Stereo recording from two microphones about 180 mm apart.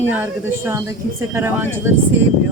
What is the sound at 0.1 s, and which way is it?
Speech, 10° right (ahead or behind).